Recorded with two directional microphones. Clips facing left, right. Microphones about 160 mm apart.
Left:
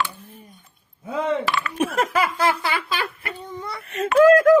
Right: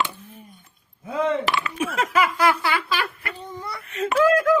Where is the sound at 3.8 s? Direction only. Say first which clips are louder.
Left 1 dB; 40° left (ahead or behind).